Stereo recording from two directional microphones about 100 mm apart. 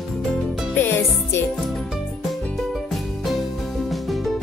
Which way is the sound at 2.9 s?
Centre (ahead or behind).